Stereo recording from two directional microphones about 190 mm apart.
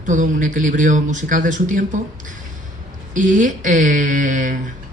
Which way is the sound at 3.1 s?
40° right (ahead or behind).